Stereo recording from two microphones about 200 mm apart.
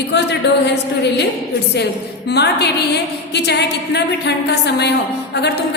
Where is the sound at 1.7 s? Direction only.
55° left (ahead or behind).